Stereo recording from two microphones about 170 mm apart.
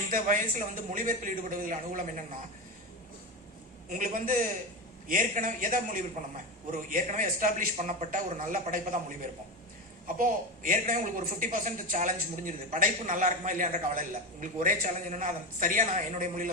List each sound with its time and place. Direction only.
0.1 s speech: 50° right (ahead or behind)
3.8 s speech: 50° right (ahead or behind)
10.2 s speech: 55° right (ahead or behind)